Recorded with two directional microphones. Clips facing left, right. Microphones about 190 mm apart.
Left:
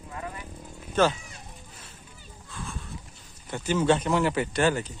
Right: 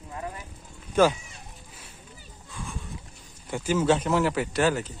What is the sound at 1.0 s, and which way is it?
Speech, 10° right (ahead or behind).